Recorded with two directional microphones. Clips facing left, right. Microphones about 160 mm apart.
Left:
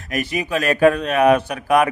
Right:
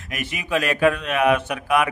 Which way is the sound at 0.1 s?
40° left (ahead or behind).